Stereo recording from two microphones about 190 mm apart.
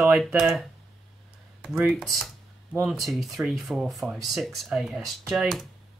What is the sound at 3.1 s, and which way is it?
Speech, centre (ahead or behind).